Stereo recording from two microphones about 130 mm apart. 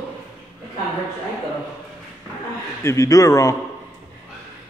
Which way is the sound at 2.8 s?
25° left (ahead or behind).